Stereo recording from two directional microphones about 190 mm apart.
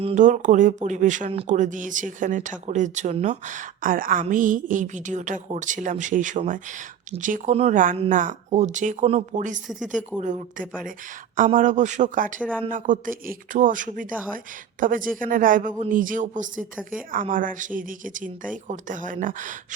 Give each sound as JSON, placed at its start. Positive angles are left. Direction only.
{"t": 0.0, "sound": "speech", "side_deg": -35}
{"t": 9.6, "sound": "speech", "side_deg": 0}
{"t": 10.2, "sound": "speech", "side_deg": -40}